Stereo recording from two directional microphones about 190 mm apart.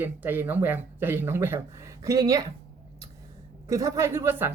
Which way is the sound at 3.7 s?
15° right (ahead or behind).